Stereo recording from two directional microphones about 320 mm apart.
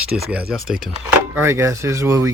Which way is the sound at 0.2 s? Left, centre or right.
Centre.